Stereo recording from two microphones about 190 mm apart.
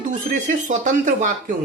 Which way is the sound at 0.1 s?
40° right (ahead or behind).